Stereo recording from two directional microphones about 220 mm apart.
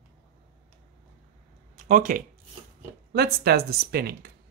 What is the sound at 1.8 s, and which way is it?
Speech, 40° right (ahead or behind).